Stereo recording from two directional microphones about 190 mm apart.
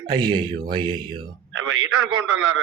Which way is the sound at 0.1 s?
25° right (ahead or behind).